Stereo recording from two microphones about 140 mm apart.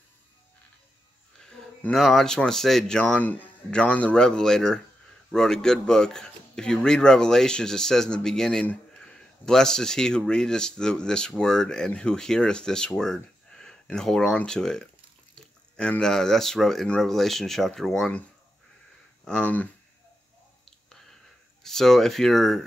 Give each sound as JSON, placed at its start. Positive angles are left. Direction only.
{"t": 1.4, "sound": "speech", "side_deg": 5}
{"t": 19.2, "sound": "speech", "side_deg": 10}
{"t": 20.6, "sound": "whispering", "side_deg": 0}
{"t": 21.6, "sound": "speech", "side_deg": 5}